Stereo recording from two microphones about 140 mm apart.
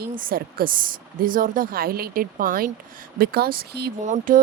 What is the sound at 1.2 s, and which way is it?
A woman's voice, 80° right.